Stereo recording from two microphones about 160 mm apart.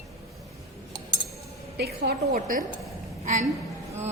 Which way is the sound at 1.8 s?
75° right (ahead or behind).